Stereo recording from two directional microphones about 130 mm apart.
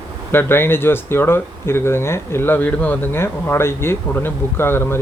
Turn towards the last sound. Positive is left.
turn(degrees=20)  # may be behind; listen again after turning